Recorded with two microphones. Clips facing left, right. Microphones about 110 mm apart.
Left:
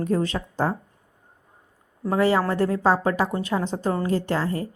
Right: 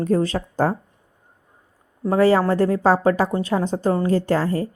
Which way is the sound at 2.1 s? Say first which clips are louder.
Right 4 dB; 35° right (ahead or behind).